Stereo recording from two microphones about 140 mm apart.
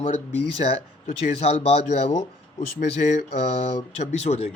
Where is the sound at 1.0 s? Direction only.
50° left (ahead or behind).